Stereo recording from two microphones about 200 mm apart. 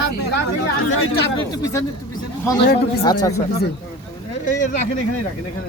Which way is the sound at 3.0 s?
20° left (ahead or behind).